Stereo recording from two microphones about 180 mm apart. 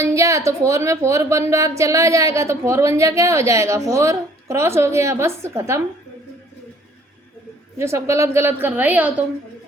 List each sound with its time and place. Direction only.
0.0 s a woman's voice: 15° right (ahead or behind)
7.8 s a woman's voice: 15° right (ahead or behind)